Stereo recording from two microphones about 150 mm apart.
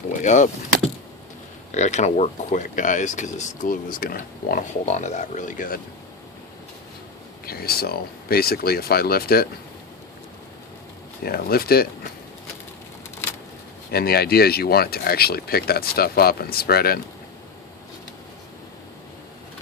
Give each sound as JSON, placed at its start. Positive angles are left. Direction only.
{"t": 0.2, "sound": "speech", "side_deg": 55}
{"t": 1.7, "sound": "speech", "side_deg": 50}
{"t": 4.9, "sound": "speech", "side_deg": 50}
{"t": 7.4, "sound": "speech", "side_deg": 90}
{"t": 11.3, "sound": "speech", "side_deg": 90}
{"t": 13.9, "sound": "speech", "side_deg": 90}